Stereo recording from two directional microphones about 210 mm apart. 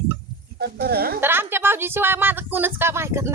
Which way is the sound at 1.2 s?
10° right (ahead or behind).